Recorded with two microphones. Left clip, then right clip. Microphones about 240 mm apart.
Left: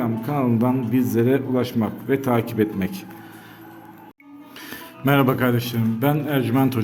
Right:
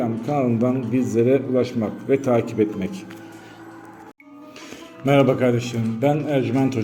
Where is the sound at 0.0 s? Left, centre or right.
Centre.